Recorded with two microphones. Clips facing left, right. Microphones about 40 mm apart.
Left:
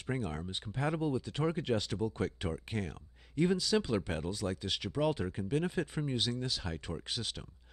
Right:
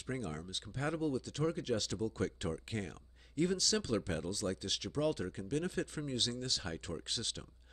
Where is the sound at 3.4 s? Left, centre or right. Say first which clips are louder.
Left 4 dB; centre.